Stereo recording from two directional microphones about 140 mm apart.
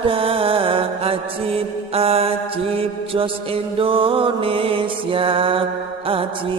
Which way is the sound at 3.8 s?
40° right (ahead or behind).